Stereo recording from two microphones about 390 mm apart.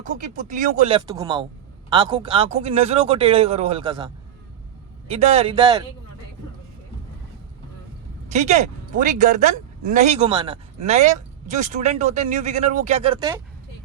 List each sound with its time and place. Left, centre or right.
0.0 s speech: centre
8.3 s speech: centre